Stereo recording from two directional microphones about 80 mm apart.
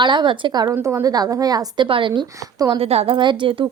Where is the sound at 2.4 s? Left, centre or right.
Right.